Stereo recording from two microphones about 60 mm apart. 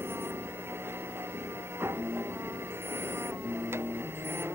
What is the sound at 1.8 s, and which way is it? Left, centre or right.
Music, right.